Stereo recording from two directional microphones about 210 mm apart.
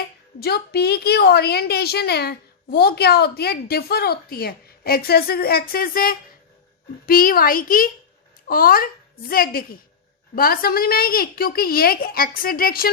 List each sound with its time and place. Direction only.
0.3 s a woman's voice: 50° left (ahead or behind)